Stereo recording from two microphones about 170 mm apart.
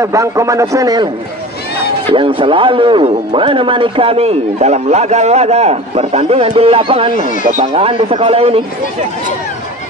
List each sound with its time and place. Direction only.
0.0 s a man's voice: 20° right (ahead or behind)
2.1 s a man's voice: 30° right (ahead or behind)